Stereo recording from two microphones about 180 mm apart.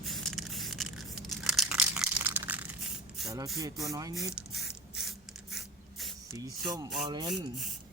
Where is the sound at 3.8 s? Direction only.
20° right (ahead or behind).